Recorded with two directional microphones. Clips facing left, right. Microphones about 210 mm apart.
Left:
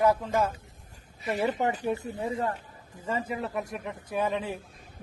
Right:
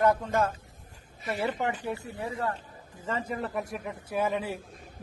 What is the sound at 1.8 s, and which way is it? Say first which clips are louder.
Speech: left 4 dB; 20° left (ahead or behind).